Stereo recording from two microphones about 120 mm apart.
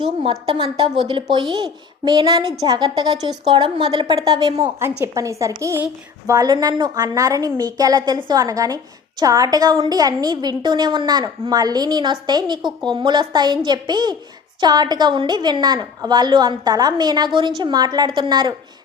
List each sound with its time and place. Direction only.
0.0 s a woman's voice: 45° right (ahead or behind)
4.8 s a woman's voice: 25° right (ahead or behind)